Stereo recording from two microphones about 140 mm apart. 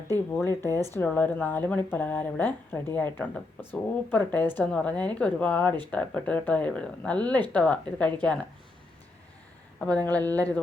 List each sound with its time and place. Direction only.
0.6 s speech: 20° left (ahead or behind)
9.8 s speech: 10° left (ahead or behind)